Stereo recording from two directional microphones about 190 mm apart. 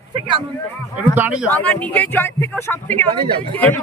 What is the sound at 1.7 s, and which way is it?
A man's voice, 10° left (ahead or behind).